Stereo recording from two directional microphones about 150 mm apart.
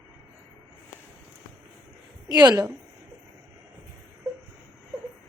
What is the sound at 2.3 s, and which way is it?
Speech, 25° right (ahead or behind).